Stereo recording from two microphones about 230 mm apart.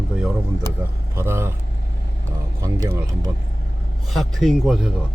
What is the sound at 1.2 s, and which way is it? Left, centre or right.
Speech, centre.